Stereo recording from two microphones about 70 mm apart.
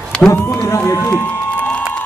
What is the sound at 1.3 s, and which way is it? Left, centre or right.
Crowd, centre.